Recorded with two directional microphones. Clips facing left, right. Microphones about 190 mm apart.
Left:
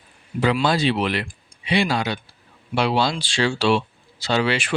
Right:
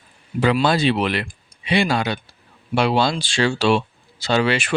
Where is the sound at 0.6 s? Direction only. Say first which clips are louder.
Right 2 dB; 55° right (ahead or behind).